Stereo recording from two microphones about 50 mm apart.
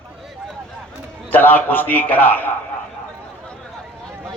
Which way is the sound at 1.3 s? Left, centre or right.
Left.